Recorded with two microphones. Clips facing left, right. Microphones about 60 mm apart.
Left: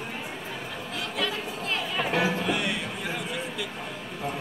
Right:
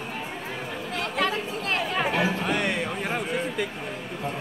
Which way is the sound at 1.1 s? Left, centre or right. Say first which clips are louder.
Right 4 dB; right.